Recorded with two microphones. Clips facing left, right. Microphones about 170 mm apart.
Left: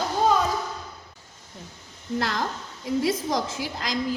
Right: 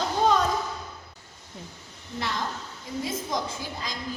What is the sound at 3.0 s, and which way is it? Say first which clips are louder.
Speech: left 4 dB; 90° left.